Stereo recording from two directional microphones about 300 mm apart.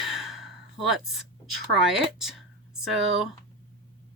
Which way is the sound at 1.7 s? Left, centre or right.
Centre.